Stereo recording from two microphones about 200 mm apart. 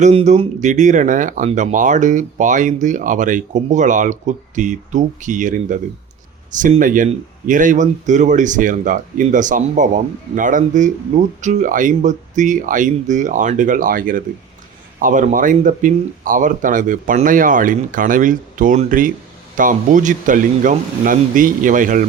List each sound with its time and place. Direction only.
0.0 s speech: 30° right (ahead or behind)